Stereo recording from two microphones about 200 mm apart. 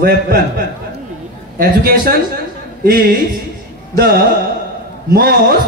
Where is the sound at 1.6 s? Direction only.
45° right (ahead or behind).